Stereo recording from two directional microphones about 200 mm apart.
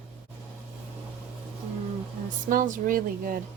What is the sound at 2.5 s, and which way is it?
Speech, 45° right (ahead or behind).